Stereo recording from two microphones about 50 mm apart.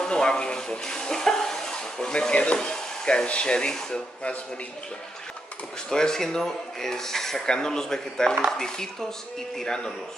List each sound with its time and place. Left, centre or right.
0.0 s speech: centre
2.7 s frying: centre
3.3 s speech: centre
5.9 s speech: centre